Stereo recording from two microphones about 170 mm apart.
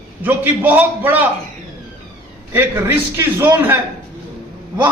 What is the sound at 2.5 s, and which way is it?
A man's voice, 15° right (ahead or behind).